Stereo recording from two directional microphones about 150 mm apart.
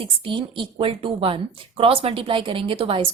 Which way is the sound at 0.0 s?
35° right (ahead or behind).